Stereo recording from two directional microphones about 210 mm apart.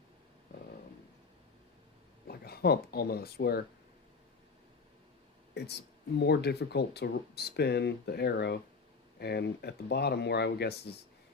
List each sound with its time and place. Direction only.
2.2 s speech: 50° left (ahead or behind)
6.1 s speech: 50° left (ahead or behind)